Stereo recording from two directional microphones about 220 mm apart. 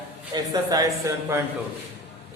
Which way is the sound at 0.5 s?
15° right (ahead or behind).